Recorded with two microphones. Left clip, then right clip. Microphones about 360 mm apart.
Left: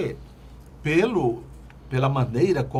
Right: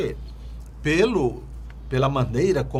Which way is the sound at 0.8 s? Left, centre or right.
Right.